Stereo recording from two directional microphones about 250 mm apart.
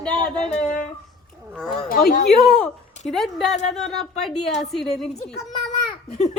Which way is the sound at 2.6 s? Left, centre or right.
Centre.